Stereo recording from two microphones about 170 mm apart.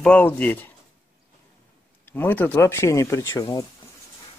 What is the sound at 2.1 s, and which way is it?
Speech, 10° left (ahead or behind).